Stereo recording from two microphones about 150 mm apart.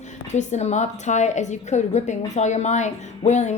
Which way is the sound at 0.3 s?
50° left (ahead or behind).